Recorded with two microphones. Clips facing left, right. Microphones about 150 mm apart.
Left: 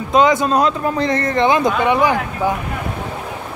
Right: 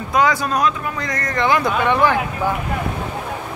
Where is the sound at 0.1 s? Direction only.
20° left (ahead or behind).